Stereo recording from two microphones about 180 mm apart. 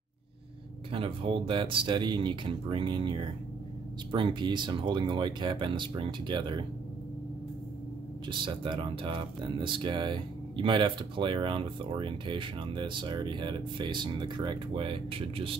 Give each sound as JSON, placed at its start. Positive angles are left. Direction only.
{"t": 0.9, "sound": "speech", "side_deg": -30}
{"t": 8.3, "sound": "speech", "side_deg": -25}